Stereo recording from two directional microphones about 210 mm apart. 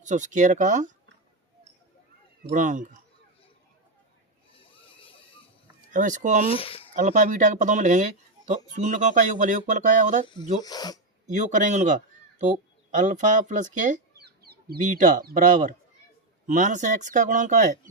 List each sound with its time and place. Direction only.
0.0 s speech: 35° right (ahead or behind)
2.5 s speech: 35° right (ahead or behind)
4.5 s a sound: 25° left (ahead or behind)
5.9 s speech: 35° right (ahead or behind)
6.5 s speech: 25° left (ahead or behind)
6.9 s speech: 35° right (ahead or behind)
10.6 s speech: 20° left (ahead or behind)
11.3 s speech: 35° right (ahead or behind)
14.4 s speech: 45° right (ahead or behind)